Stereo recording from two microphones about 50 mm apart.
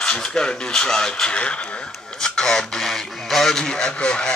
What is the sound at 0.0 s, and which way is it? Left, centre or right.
Speech, centre.